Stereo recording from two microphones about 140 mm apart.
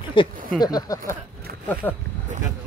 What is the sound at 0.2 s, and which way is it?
Speech, 35° left (ahead or behind).